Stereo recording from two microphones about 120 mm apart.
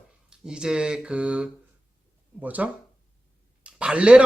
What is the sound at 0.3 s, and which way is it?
A woman's voice, 5° right (ahead or behind).